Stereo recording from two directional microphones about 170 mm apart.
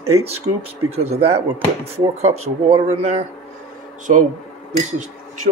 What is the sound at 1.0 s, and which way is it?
Speech, 35° right (ahead or behind).